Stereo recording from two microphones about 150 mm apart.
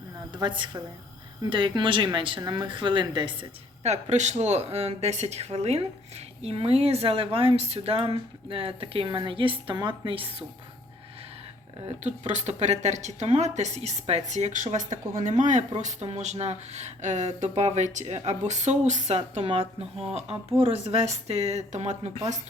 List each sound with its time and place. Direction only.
0.3 s speech: 30° right (ahead or behind)
3.8 s speech: 50° right (ahead or behind)
12.0 s speech: 50° right (ahead or behind)